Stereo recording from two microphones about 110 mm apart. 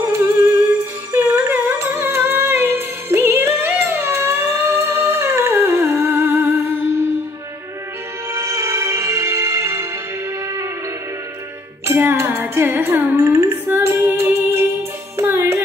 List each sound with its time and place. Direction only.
0.0 s music: 25° right (ahead or behind)
8.3 s music: 25° right (ahead or behind)
11.8 s music: 20° right (ahead or behind)